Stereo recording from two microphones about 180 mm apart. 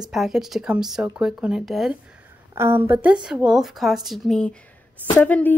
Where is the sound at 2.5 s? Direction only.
15° right (ahead or behind).